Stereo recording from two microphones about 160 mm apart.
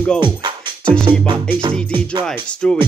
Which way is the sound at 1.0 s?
30° right (ahead or behind).